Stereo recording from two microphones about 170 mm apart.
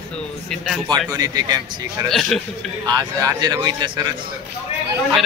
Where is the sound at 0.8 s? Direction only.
20° right (ahead or behind).